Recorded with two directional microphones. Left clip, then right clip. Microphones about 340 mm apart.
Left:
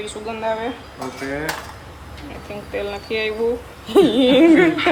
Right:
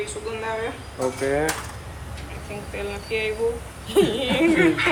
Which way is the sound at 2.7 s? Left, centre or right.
Left.